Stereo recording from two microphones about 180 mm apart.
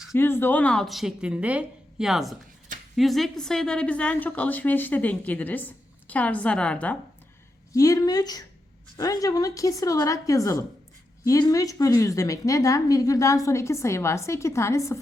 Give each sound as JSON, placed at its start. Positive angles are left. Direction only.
{"t": 0.1, "sound": "a woman's voice", "side_deg": 10}
{"t": 7.7, "sound": "a woman's voice", "side_deg": 20}